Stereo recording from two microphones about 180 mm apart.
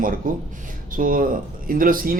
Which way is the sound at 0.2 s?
50° right (ahead or behind).